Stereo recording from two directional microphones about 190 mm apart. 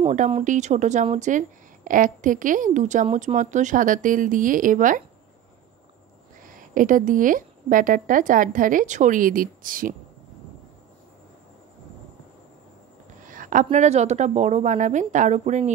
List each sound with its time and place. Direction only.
0.0 s a woman's voice: 35° right (ahead or behind)
6.4 s a woman's voice: 45° right (ahead or behind)
13.3 s a woman's voice: 45° right (ahead or behind)